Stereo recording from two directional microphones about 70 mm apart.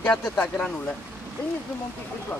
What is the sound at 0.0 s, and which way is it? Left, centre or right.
Speech, centre.